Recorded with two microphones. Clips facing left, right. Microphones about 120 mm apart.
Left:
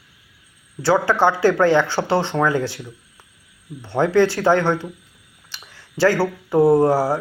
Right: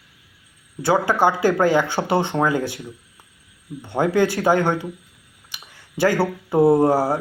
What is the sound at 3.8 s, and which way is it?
Speech, 10° right (ahead or behind).